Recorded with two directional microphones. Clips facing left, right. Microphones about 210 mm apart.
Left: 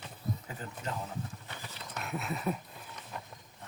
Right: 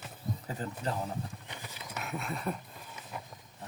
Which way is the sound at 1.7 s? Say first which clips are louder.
Even; centre (ahead or behind).